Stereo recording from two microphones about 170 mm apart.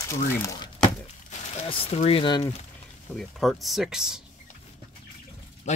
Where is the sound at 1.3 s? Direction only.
35° left (ahead or behind).